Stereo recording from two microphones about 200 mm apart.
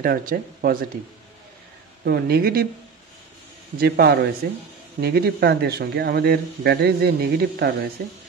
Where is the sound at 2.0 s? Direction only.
50° right (ahead or behind).